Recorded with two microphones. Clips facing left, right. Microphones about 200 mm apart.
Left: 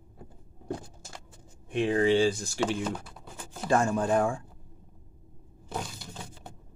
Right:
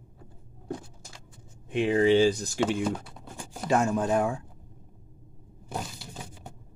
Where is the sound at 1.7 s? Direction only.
15° right (ahead or behind).